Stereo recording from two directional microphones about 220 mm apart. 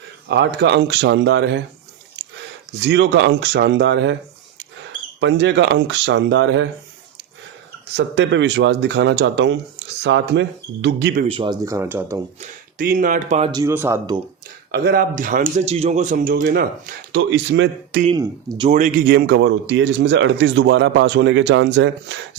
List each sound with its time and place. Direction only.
0.3 s speech: 50° right (ahead or behind)
2.7 s speech: 50° right (ahead or behind)
5.2 s speech: 50° right (ahead or behind)
7.9 s speech: 50° right (ahead or behind)
11.3 s speech: 20° right (ahead or behind)
12.4 s speech: 40° right (ahead or behind)
13.5 s speech: 15° right (ahead or behind)
14.7 s speech: 45° right (ahead or behind)
18.2 s speech: 20° right (ahead or behind)
18.7 s speech: 35° right (ahead or behind); by 22.2 s 55° right (ahead or behind)